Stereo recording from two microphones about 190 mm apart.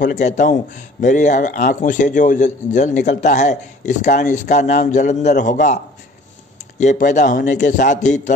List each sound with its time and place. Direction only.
0.0 s speech: 40° left (ahead or behind)
6.8 s speech: 40° left (ahead or behind)